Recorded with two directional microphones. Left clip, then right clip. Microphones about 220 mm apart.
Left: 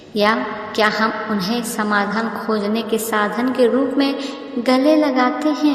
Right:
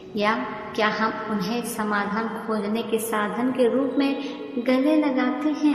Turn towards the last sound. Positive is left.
turn(degrees=35)  # may be behind; listen again after turning